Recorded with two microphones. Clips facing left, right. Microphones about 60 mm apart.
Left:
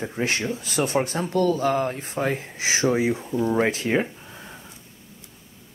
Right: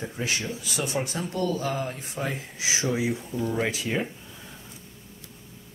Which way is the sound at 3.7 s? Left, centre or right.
Left.